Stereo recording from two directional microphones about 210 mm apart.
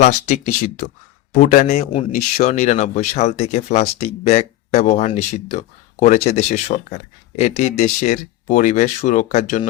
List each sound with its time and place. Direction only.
0.1 s a man's voice: 35° left (ahead or behind)